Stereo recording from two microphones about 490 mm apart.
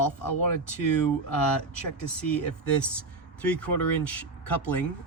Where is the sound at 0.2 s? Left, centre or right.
Left.